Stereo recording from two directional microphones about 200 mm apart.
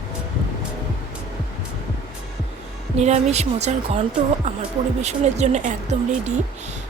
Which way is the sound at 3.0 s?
35° right (ahead or behind).